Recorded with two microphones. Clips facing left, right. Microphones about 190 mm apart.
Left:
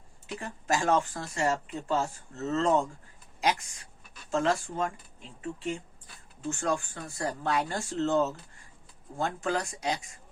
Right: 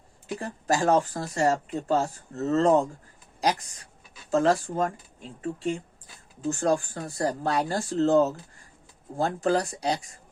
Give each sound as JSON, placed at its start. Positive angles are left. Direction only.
{"t": 0.3, "sound": "speech", "side_deg": -35}